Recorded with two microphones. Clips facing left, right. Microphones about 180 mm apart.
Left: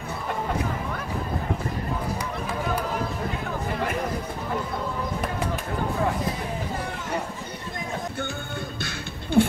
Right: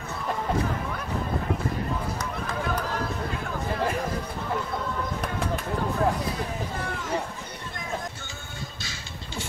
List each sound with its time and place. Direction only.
2.4 s run: 10° left (ahead or behind)
8.8 s music: 60° left (ahead or behind)